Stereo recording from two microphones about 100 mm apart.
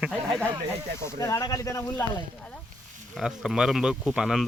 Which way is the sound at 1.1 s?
35° left (ahead or behind).